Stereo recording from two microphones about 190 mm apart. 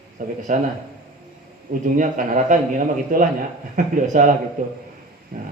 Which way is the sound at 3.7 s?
45° right (ahead or behind).